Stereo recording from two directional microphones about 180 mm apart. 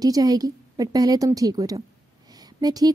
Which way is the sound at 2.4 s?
20° right (ahead or behind).